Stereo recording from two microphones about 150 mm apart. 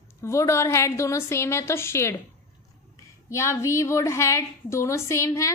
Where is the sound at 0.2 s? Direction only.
20° left (ahead or behind).